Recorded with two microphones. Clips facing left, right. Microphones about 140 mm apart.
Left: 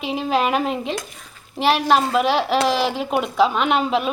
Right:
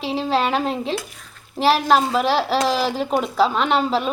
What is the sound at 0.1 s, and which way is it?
Speech, 5° left (ahead or behind).